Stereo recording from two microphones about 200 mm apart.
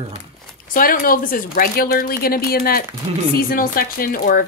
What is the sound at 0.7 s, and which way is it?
Speech, 45° left (ahead or behind).